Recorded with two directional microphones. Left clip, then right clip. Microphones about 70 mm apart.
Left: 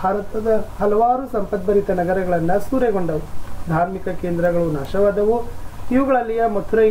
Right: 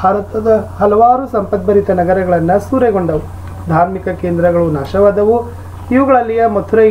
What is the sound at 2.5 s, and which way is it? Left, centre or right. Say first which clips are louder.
Speech: right 7 dB; centre.